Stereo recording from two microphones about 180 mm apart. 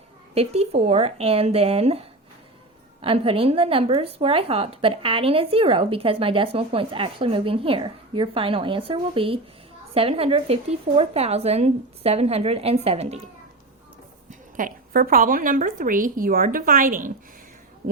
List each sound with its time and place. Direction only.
0.3 s a woman's voice: 35° right (ahead or behind)
14.3 s a woman's voice: 45° right (ahead or behind)